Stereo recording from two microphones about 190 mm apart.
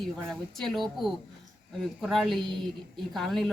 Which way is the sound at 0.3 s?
Centre (ahead or behind).